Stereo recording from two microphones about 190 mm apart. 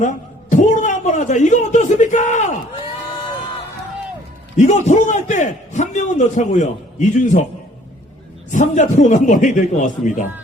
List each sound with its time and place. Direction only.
0.5 s a man's voice: 40° left (ahead or behind)
4.5 s a man's voice: 40° left (ahead or behind)
8.5 s a man's voice: 40° left (ahead or behind)